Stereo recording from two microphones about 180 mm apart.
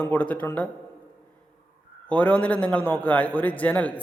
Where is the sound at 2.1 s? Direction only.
5° left (ahead or behind).